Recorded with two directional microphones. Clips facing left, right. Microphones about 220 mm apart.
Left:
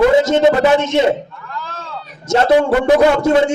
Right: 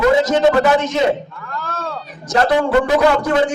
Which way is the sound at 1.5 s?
50° right (ahead or behind).